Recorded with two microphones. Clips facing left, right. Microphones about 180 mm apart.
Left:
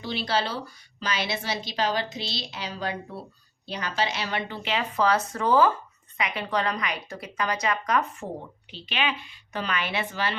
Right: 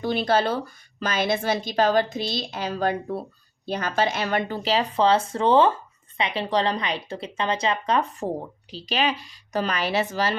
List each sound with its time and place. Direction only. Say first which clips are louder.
0.0 s speech: right 6 dB; 50° right (ahead or behind)